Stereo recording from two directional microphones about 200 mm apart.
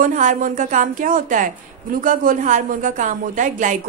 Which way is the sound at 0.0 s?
40° right (ahead or behind).